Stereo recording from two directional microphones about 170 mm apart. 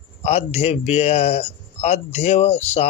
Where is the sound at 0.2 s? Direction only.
40° left (ahead or behind).